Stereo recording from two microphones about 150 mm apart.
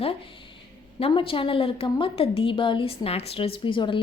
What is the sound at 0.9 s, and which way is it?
A woman's voice, 40° left (ahead or behind).